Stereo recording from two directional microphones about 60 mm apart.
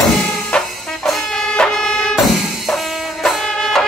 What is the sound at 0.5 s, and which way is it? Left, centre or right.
Music, centre.